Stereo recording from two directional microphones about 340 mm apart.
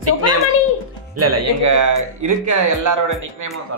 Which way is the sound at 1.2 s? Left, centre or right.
Right.